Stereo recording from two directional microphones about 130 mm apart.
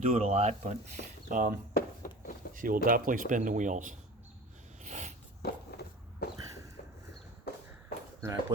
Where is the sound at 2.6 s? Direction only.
90° right.